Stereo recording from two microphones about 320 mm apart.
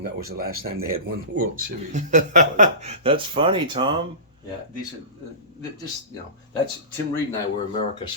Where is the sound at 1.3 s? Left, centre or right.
Right.